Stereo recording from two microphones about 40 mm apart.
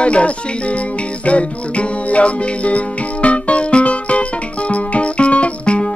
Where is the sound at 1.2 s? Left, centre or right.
Left.